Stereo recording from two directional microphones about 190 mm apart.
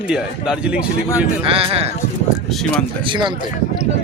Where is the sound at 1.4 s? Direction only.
30° right (ahead or behind).